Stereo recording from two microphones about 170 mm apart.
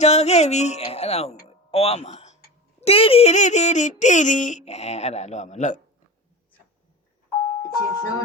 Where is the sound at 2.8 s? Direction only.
35° left (ahead or behind).